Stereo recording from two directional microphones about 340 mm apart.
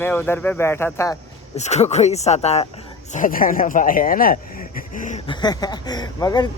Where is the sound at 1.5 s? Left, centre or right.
Centre.